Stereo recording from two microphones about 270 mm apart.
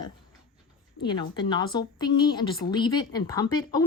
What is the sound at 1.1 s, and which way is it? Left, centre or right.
A woman's voice, centre.